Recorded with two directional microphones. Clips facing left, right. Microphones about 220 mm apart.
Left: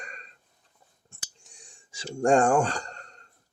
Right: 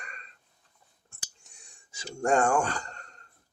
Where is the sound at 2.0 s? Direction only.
30° left (ahead or behind).